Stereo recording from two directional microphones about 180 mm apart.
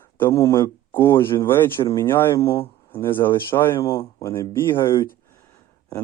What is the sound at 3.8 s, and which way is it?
Speech, 30° left (ahead or behind).